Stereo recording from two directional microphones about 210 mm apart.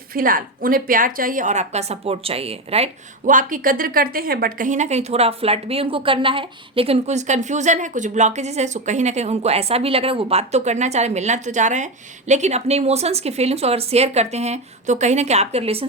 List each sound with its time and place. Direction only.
0.1 s a woman's voice: 40° right (ahead or behind)